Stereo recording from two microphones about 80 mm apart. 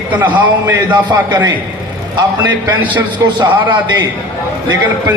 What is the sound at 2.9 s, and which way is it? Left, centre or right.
A man's voice, right.